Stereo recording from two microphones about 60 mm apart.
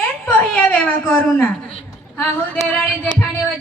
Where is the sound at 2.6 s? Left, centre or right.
Left.